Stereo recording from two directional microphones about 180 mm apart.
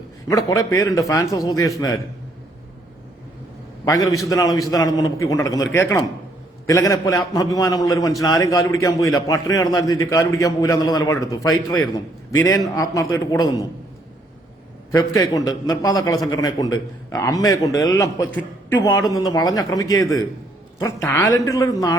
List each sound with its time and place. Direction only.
0.3 s a man's voice: 20° left (ahead or behind)
3.8 s a man's voice: 20° left (ahead or behind)
14.9 s a man's voice: 20° left (ahead or behind)